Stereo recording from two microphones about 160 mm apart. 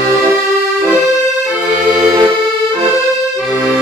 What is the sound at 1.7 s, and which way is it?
Accordion, 10° right (ahead or behind).